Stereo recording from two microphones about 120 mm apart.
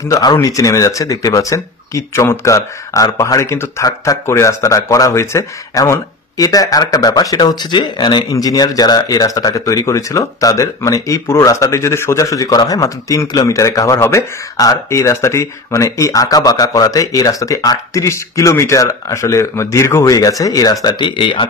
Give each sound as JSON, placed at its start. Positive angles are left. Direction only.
{"t": 0.1, "sound": "speech", "side_deg": 30}
{"t": 20.8, "sound": "speech", "side_deg": 40}